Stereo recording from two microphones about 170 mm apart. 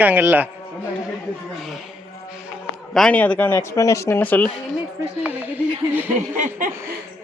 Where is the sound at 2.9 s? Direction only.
5° left (ahead or behind).